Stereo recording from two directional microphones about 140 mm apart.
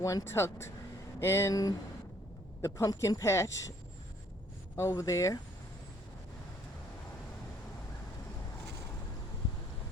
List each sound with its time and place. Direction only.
0.0 s speech: 25° left (ahead or behind)
4.8 s speech: 20° left (ahead or behind)